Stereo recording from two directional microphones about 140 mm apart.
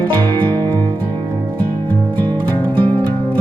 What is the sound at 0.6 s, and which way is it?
Music, 30° right (ahead or behind).